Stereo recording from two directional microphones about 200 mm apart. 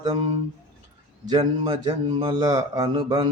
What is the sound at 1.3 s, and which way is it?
Mantra, 20° right (ahead or behind).